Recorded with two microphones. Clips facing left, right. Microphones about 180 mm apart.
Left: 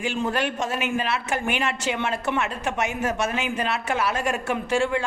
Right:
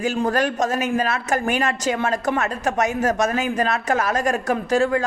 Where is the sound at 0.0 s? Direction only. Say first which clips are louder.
Right 5 dB; 40° right (ahead or behind).